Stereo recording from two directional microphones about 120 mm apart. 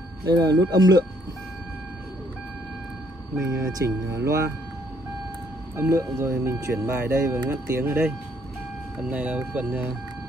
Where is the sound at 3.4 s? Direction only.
25° right (ahead or behind).